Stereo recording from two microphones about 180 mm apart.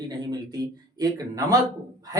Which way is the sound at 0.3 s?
20° right (ahead or behind).